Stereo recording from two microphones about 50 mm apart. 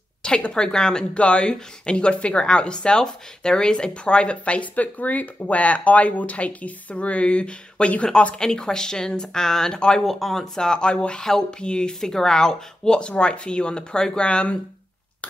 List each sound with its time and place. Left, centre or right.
0.2 s speech: centre
1.1 s a woman's voice: left
10.0 s a woman's voice: centre